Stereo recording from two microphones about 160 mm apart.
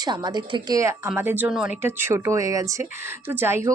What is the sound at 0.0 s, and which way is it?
A woman's voice, 25° right (ahead or behind).